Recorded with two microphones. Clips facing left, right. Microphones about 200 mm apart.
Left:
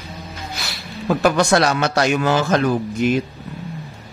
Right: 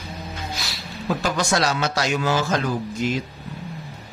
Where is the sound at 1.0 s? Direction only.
60° left (ahead or behind).